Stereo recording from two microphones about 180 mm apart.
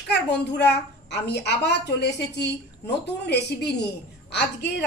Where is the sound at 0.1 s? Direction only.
70° left (ahead or behind).